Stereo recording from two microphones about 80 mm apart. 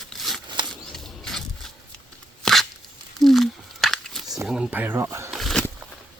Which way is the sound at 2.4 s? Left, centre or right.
Centre.